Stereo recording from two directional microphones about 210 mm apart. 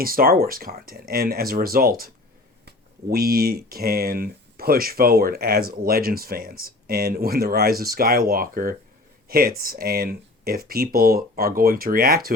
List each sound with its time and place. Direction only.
0.0 s speech: 45° right (ahead or behind)